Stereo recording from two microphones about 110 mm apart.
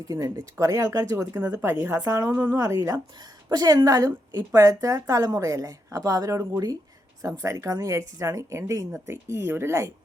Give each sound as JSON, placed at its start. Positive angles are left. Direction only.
{"t": 0.1, "sound": "a woman's voice", "side_deg": -30}
{"t": 1.4, "sound": "speech", "side_deg": -15}
{"t": 1.9, "sound": "speech", "side_deg": -30}
{"t": 2.3, "sound": "speech", "side_deg": -15}
{"t": 2.6, "sound": "a woman's voice", "side_deg": -30}